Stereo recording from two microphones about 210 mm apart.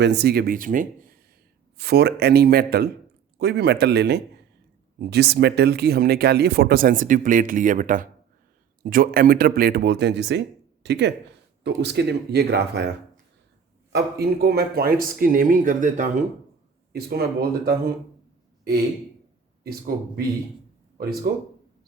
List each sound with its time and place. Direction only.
0.0 s speech: 50° right (ahead or behind)
1.8 s speech: 50° right (ahead or behind)
13.9 s speech: 50° right (ahead or behind)
19.6 s speech: 45° right (ahead or behind)
21.3 s speech: 50° right (ahead or behind)